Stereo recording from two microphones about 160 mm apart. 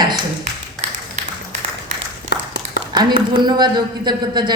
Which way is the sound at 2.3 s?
90° left.